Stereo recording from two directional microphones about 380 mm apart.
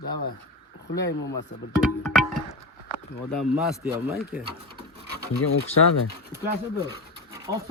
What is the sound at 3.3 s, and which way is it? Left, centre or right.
Speech, centre.